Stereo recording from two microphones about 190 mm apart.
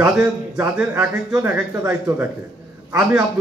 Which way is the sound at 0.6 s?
10° right (ahead or behind).